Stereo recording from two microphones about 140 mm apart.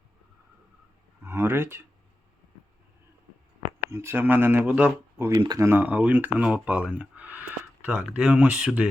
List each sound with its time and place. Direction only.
1.2 s speech: 15° right (ahead or behind)
3.8 s speech: 20° right (ahead or behind)
5.4 s speech: 30° right (ahead or behind)
5.6 s speech: 10° right (ahead or behind)